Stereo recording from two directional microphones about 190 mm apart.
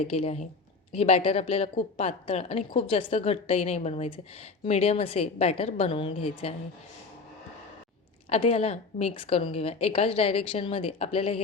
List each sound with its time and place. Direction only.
0.0 s a woman's voice: 35° left (ahead or behind)
8.3 s a woman's voice: 30° left (ahead or behind)